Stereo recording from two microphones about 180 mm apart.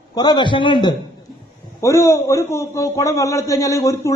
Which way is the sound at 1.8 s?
15° left (ahead or behind).